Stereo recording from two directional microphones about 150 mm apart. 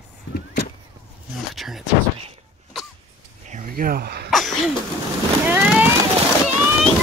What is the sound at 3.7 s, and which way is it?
Speech, 80° right.